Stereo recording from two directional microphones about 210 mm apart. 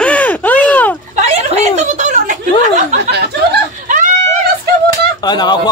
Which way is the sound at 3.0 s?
50° right (ahead or behind).